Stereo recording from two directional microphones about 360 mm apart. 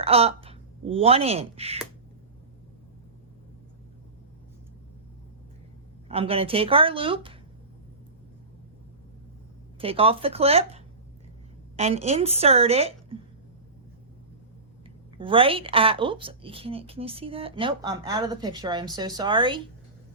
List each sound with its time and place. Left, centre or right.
0.0 s speech: centre
6.1 s a woman's voice: centre
9.7 s a woman's voice: centre
15.2 s a woman's voice: centre